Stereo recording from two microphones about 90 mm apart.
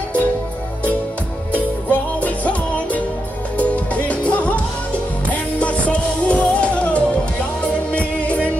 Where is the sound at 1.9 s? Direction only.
15° left (ahead or behind).